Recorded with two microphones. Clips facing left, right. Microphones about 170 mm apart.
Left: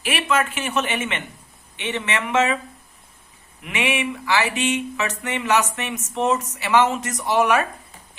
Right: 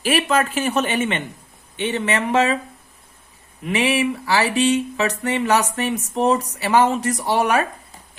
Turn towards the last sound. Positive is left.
turn(degrees=-35)  # may be behind; listen again after turning